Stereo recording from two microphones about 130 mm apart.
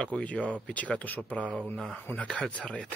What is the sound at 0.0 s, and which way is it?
Speech, 10° left (ahead or behind).